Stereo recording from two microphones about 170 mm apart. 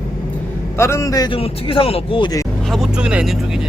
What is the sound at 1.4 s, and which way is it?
Speech, 35° left (ahead or behind).